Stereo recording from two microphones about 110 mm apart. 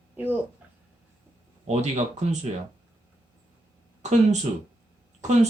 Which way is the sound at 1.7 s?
90° right.